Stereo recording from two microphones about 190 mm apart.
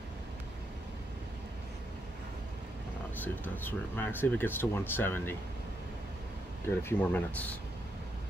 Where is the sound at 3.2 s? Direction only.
10° left (ahead or behind).